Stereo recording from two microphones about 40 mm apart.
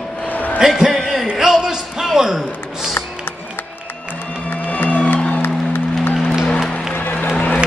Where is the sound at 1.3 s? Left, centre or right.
Centre.